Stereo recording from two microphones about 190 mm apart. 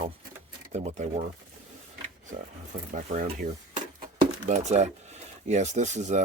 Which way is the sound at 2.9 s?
45° right (ahead or behind).